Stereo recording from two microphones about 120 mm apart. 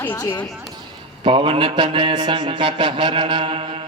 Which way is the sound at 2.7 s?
40° right (ahead or behind).